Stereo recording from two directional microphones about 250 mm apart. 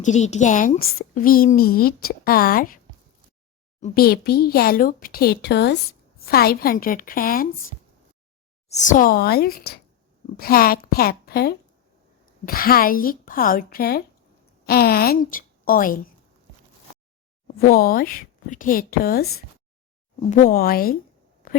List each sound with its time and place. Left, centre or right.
0.0 s a woman's voice: left
3.8 s a woman's voice: left
17.7 s a woman's voice: left
21.4 s a sound: left